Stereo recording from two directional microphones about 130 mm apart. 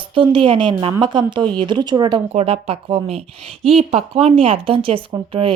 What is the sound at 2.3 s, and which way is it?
A woman's voice, 50° right (ahead or behind).